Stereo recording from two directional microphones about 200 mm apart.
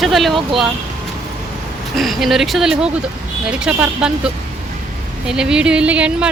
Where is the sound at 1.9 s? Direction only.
Centre (ahead or behind).